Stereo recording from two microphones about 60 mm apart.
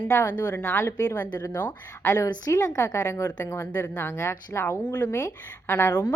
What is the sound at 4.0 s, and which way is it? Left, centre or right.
A woman's voice, left.